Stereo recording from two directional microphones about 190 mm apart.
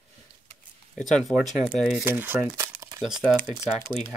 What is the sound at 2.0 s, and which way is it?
Speech, 10° right (ahead or behind).